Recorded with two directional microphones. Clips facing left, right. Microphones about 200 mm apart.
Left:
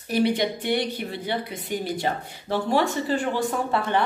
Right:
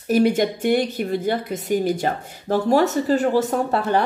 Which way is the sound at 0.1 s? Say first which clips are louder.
Right 5 dB; 45° right (ahead or behind).